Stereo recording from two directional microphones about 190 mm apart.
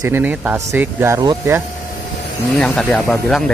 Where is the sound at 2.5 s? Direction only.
5° left (ahead or behind).